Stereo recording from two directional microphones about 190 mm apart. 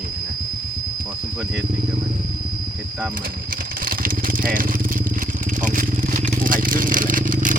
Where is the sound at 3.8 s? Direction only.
50° right (ahead or behind).